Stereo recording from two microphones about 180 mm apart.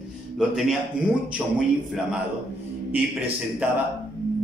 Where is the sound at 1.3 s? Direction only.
5° right (ahead or behind).